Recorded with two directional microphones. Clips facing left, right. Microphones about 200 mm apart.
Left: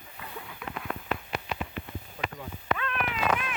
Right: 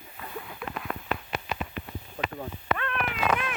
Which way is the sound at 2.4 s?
55° right (ahead or behind).